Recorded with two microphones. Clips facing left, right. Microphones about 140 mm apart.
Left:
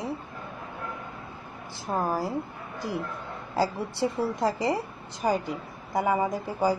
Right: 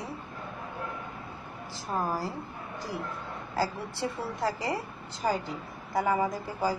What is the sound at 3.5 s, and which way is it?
A woman's voice, 20° left (ahead or behind).